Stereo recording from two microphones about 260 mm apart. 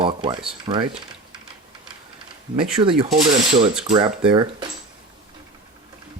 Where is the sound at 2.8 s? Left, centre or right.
Centre.